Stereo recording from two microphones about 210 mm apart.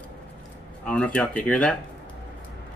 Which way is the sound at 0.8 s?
5° left (ahead or behind).